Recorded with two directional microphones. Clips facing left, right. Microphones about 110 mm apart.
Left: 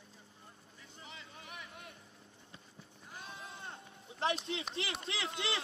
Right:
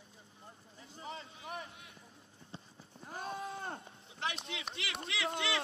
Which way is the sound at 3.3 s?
65° right (ahead or behind).